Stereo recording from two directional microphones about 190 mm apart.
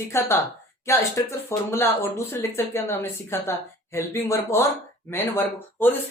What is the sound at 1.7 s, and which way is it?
Speech, 10° left (ahead or behind).